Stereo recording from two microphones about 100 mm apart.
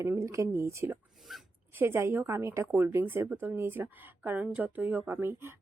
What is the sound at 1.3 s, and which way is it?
Speech, 5° right (ahead or behind).